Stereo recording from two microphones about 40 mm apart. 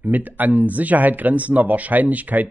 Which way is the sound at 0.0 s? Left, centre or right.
Right.